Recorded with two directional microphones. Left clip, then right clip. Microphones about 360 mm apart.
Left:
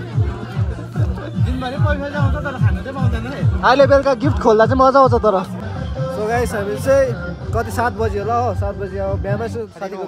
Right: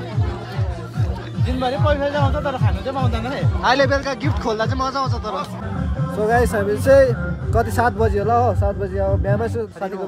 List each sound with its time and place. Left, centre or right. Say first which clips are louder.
3.3 s speech: left 5 dB; centre